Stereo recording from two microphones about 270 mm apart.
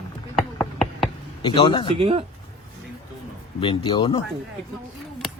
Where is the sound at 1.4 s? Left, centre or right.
Centre.